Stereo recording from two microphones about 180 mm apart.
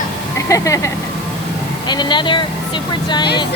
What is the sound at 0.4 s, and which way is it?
Speech, 15° left (ahead or behind).